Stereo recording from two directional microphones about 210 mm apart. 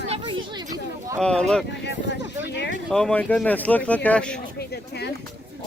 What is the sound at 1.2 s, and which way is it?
Speech, 5° left (ahead or behind).